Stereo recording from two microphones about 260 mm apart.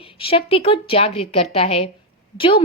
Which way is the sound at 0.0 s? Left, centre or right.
Left.